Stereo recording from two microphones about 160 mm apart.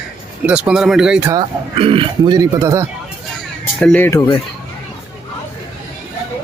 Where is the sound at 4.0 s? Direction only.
20° left (ahead or behind).